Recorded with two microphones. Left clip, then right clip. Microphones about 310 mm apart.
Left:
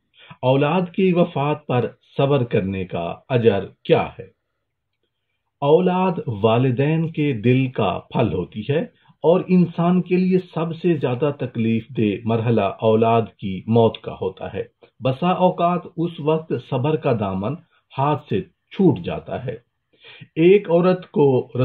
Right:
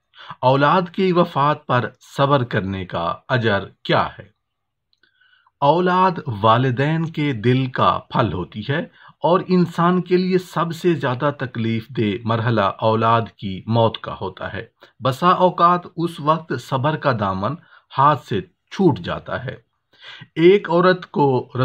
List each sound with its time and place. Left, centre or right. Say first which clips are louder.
0.2 s a sound: right 3 dB; right
1.1 s speech: right 3 dB; right
5.6 s speech: right 2 dB; right